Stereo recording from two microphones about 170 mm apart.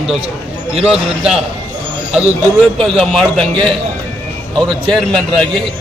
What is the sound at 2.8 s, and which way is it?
Speech, centre (ahead or behind).